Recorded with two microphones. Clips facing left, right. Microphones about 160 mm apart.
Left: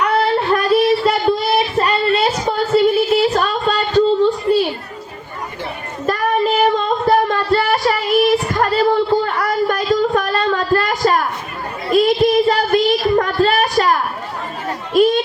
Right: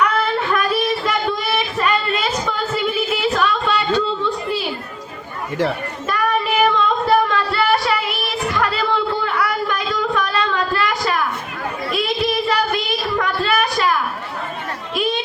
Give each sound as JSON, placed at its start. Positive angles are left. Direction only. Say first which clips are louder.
{"t": 0.0, "sound": "child singing", "louder": "left 3 dB", "side_deg": 35}
{"t": 4.5, "sound": "speech", "louder": "left 9 dB", "side_deg": 35}
{"t": 6.7, "sound": "female singing", "louder": "left 2 dB", "side_deg": 40}
{"t": 11.9, "sound": "child singing", "louder": "left 9 dB", "side_deg": 45}
{"t": 14.9, "sound": "a sound", "louder": "left 9 dB", "side_deg": 45}